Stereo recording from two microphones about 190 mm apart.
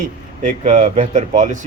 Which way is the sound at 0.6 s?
35° right (ahead or behind).